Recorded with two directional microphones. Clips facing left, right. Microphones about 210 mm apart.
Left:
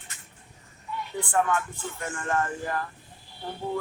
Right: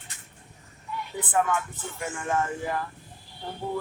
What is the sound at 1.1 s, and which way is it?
Speech, 5° right (ahead or behind).